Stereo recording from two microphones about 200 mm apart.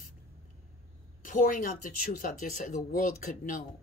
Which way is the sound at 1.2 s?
40° left (ahead or behind).